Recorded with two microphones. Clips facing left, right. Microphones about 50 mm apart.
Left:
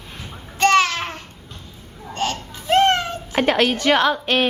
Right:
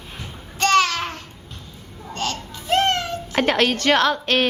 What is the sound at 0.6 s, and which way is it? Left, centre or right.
Babbling, centre.